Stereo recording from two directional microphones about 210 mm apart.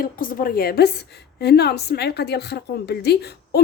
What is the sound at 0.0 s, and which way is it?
A woman's voice, 40° left (ahead or behind).